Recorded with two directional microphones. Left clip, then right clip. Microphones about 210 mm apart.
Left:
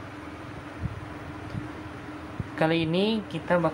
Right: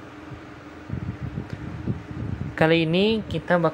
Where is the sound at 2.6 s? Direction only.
25° right (ahead or behind).